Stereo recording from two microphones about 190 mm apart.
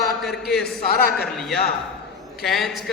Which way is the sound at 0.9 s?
55° left (ahead or behind).